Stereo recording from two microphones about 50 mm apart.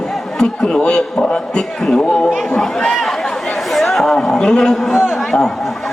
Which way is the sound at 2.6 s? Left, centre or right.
Centre.